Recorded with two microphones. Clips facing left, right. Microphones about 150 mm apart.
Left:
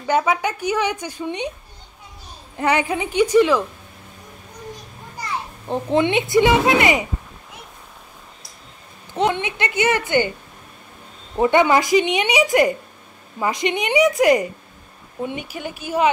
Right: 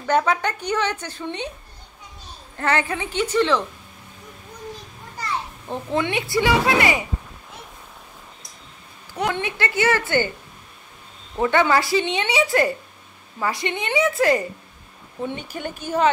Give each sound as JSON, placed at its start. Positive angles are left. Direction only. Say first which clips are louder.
{"t": 0.0, "sound": "a woman's voice", "louder": "left 1 dB", "side_deg": 10}
{"t": 2.5, "sound": "a woman's voice", "louder": "left 3 dB", "side_deg": 15}
{"t": 5.7, "sound": "speech", "louder": "left 5 dB", "side_deg": 20}
{"t": 9.1, "sound": "speech", "louder": "left 4 dB", "side_deg": 20}
{"t": 11.3, "sound": "a woman's voice", "louder": "left 3 dB", "side_deg": 20}